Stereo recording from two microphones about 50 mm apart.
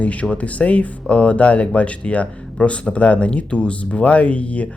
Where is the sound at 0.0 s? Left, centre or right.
Left.